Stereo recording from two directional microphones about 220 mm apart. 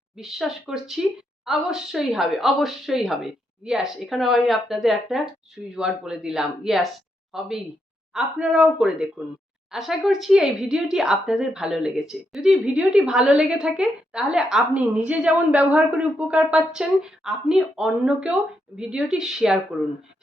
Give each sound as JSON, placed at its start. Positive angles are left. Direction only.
{"t": 0.2, "sound": "speech", "side_deg": 0}